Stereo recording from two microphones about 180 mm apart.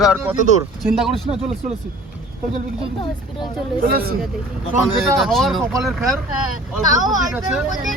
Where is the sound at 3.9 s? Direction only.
55° right (ahead or behind).